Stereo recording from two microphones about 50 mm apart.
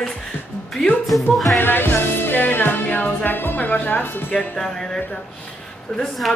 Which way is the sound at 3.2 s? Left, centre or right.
Left.